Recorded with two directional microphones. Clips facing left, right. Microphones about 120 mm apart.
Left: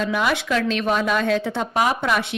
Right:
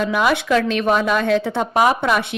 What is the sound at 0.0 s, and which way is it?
A woman's voice, 55° right (ahead or behind).